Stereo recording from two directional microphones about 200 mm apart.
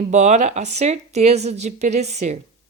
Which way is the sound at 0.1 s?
35° right (ahead or behind).